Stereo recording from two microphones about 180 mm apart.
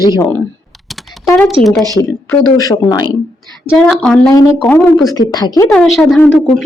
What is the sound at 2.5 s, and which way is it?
Speech, 20° left (ahead or behind).